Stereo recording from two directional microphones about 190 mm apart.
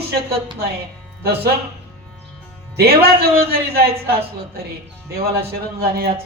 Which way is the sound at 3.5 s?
55° right (ahead or behind).